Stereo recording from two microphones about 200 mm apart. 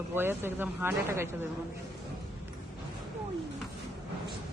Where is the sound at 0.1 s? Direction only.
10° right (ahead or behind).